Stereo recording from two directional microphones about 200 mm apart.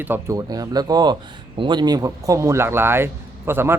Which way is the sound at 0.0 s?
10° right (ahead or behind).